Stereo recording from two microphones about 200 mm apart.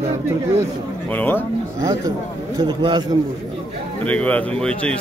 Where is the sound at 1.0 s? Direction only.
10° left (ahead or behind).